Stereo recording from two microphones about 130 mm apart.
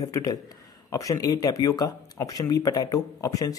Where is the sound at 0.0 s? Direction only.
25° left (ahead or behind).